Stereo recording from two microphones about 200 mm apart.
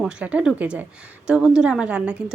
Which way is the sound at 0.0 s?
5° right (ahead or behind).